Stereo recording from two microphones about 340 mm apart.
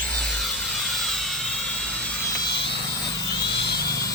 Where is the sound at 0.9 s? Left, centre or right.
Centre.